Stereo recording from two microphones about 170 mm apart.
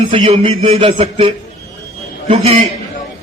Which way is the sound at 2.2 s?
40° right (ahead or behind).